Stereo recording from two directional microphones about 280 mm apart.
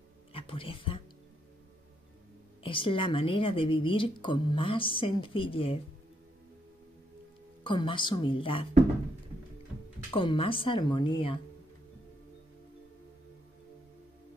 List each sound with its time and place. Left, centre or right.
0.3 s a sound: centre
2.6 s a woman's voice: centre
7.6 s speech: centre
10.1 s speech: centre